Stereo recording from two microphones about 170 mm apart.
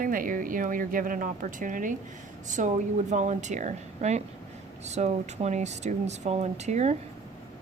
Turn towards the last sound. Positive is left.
turn(degrees=-40)  # may be behind; listen again after turning